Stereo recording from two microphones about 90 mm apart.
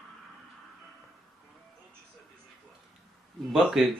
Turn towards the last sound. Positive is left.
turn(degrees=0)  # may be behind; listen again after turning